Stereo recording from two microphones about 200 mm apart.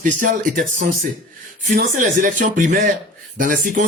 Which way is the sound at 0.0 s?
40° right (ahead or behind).